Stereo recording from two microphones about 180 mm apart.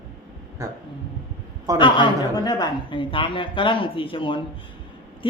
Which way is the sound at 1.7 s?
25° left (ahead or behind).